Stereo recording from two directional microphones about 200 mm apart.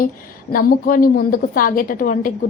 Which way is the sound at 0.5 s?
45° left (ahead or behind).